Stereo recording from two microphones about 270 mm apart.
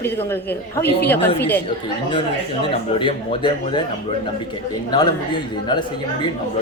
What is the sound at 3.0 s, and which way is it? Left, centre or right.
Speech, centre.